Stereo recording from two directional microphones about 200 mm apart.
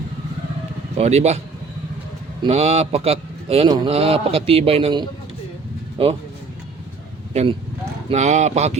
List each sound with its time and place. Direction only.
0.9 s speech: 30° right (ahead or behind)
2.4 s speech: 30° right (ahead or behind)
8.1 s speech: 35° right (ahead or behind)